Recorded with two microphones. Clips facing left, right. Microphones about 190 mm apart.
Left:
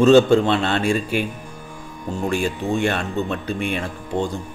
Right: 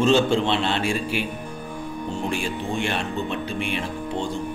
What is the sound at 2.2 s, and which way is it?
A man's voice, 45° left (ahead or behind).